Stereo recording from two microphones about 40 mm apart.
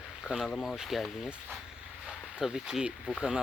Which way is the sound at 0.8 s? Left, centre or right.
Centre.